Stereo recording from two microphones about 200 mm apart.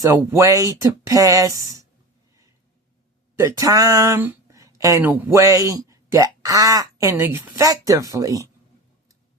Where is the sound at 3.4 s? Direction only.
15° right (ahead or behind).